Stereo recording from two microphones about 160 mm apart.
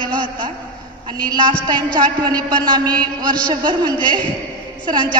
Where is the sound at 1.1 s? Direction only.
25° right (ahead or behind).